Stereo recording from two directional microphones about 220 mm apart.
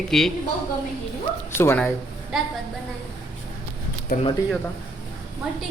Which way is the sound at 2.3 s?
Centre (ahead or behind).